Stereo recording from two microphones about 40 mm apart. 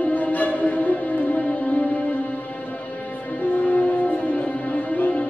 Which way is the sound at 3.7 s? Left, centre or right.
Left.